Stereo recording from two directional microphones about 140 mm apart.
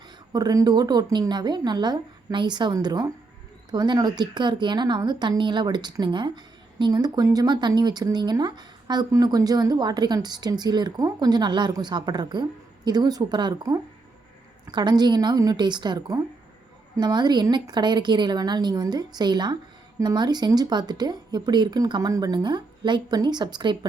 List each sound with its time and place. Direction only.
0.3 s a woman's voice: 30° right (ahead or behind)